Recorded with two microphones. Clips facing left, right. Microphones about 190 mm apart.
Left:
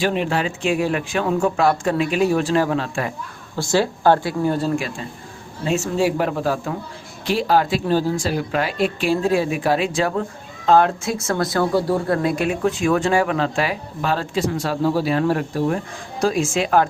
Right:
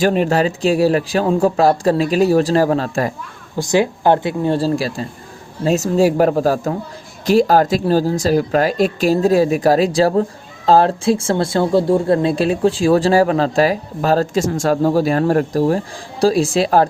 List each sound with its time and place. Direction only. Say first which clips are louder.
0.0 s speech: right 6 dB; 40° right (ahead or behind)
3.6 s speech: right 3 dB; 15° right (ahead or behind); by 16.9 s 35° right (ahead or behind)